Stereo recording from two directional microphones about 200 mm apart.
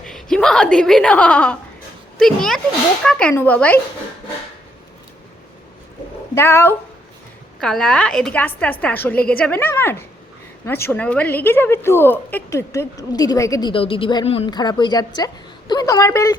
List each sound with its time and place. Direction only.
0.0 s a woman's voice: 5° left (ahead or behind)
6.3 s a woman's voice: 15° left (ahead or behind)